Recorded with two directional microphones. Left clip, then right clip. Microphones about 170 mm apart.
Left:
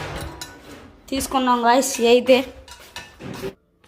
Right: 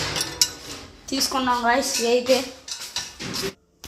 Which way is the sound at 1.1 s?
45° left (ahead or behind).